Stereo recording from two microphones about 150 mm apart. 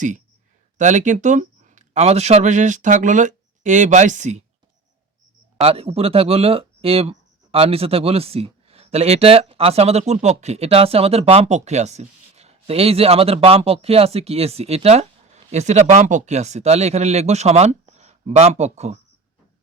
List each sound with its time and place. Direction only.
0.8 s speech: 55° right (ahead or behind)
5.5 s speech: 40° right (ahead or behind)